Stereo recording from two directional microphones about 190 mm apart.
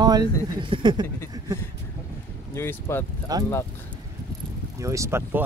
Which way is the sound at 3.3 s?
20° right (ahead or behind).